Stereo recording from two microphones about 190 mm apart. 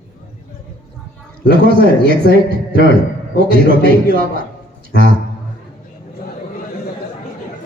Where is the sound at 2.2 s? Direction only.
60° left (ahead or behind).